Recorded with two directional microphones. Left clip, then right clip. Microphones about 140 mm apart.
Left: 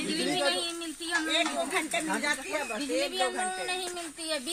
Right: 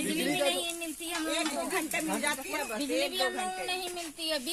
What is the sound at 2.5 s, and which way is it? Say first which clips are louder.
Speech: left 2 dB; 30° left (ahead or behind).